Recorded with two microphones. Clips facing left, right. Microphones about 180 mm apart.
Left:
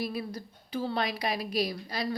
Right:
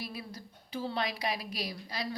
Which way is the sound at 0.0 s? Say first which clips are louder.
Left 8 dB; 45° left (ahead or behind).